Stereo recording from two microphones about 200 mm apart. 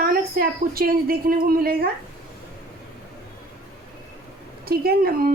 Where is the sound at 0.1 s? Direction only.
50° right (ahead or behind).